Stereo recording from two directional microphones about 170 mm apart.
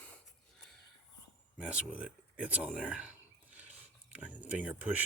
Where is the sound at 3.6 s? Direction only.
10° right (ahead or behind).